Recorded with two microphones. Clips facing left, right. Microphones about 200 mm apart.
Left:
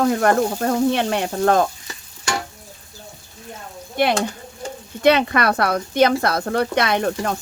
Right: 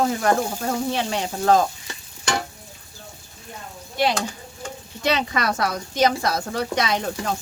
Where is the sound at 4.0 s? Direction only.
55° left (ahead or behind).